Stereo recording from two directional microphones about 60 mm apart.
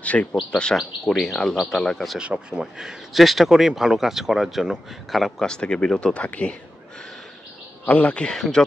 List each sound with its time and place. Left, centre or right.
0.0 s speech: left
2.1 s speech: centre; by 6.5 s left
7.8 s speech: left
8.3 s speech: centre